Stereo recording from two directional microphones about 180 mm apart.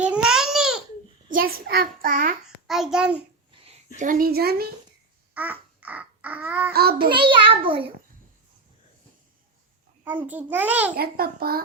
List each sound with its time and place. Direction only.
0.0 s babbling: 5° right (ahead or behind)
1.3 s a child's voice: 55° right (ahead or behind)
2.6 s a child's voice: centre (ahead or behind)
3.9 s a child's voice: 45° right (ahead or behind)
5.3 s babbling: 10° right (ahead or behind)
7.0 s a child's voice: 25° right (ahead or behind)
10.0 s a child's voice: 10° right (ahead or behind)
10.9 s a child's voice: 55° right (ahead or behind)